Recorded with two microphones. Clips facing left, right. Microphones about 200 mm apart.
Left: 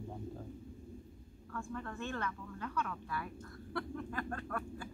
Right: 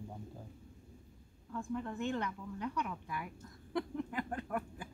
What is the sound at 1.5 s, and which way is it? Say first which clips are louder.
Speech: right 4 dB; 15° right (ahead or behind).